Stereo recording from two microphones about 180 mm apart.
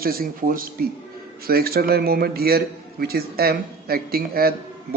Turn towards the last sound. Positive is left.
turn(degrees=-55)  # may be behind; listen again after turning